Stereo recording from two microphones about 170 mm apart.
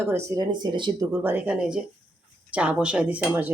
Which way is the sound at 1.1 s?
10° right (ahead or behind).